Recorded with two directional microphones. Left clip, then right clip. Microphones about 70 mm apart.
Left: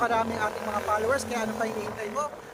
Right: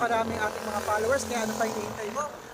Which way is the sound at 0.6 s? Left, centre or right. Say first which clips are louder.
Left 1 dB; right.